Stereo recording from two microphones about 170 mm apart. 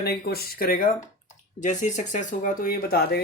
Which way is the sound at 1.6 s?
45° left (ahead or behind).